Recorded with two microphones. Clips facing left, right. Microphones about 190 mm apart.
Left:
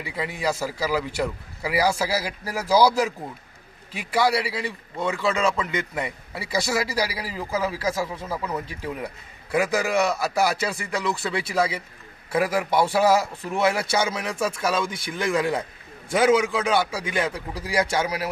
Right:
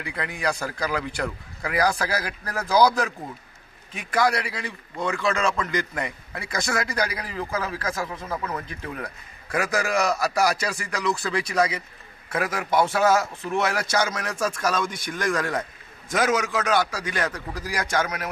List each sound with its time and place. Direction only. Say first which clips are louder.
0.0 s a man's voice: left 1 dB; 5° left (ahead or behind)
12.3 s a man's voice: left 3 dB; 30° left (ahead or behind)
14.0 s speech: left 1 dB; 5° left (ahead or behind)
16.1 s a man's voice: left 4 dB; 30° left (ahead or behind)
17.1 s speech: left 2 dB; 10° left (ahead or behind)
17.6 s a man's voice: left 7 dB; 30° left (ahead or behind)